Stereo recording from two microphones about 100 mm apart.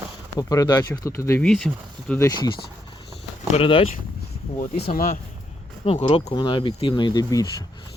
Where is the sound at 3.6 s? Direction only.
65° left (ahead or behind).